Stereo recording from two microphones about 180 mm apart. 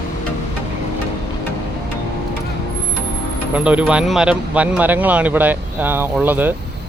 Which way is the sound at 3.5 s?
5° right (ahead or behind).